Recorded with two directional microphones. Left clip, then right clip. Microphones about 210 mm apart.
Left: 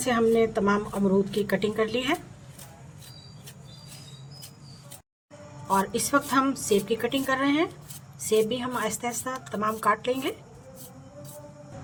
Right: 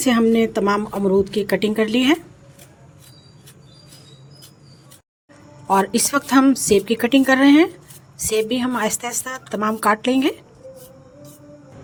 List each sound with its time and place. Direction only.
0.0 s a woman's voice: 35° right (ahead or behind)
5.6 s a woman's voice: 40° right (ahead or behind)